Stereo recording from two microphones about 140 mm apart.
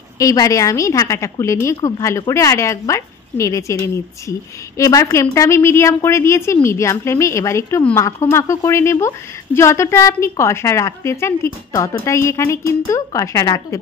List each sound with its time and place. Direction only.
0.2 s a woman's voice: 25° left (ahead or behind)